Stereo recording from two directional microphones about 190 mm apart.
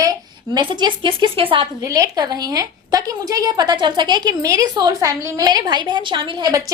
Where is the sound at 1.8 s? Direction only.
20° right (ahead or behind).